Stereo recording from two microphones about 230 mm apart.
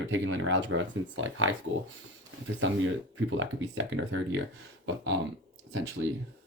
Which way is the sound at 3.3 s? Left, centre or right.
Right.